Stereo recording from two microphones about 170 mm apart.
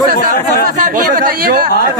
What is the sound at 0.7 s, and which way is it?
Speech, 50° right (ahead or behind).